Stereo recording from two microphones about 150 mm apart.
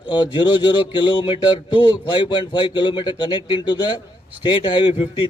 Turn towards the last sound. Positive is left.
turn(degrees=35)  # may be behind; listen again after turning